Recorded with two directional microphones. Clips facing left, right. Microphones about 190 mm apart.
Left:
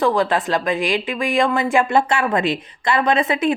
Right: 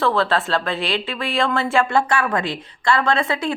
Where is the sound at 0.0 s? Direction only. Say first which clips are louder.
Left 2 dB; 15° left (ahead or behind).